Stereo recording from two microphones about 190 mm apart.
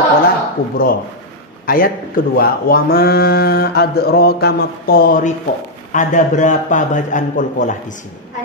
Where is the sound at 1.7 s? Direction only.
50° left (ahead or behind).